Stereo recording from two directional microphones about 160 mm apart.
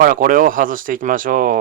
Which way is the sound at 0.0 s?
60° right (ahead or behind).